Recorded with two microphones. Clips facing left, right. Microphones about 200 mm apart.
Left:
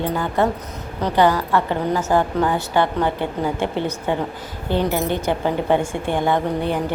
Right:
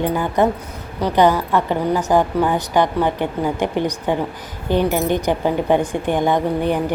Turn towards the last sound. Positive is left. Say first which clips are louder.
# right 2 dB
turn(degrees=-15)  # may be behind; listen again after turning